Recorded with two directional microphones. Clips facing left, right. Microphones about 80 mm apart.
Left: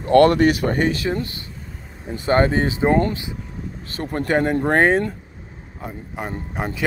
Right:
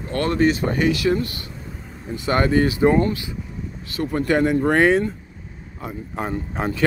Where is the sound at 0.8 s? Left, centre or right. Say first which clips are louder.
Right 2 dB; left.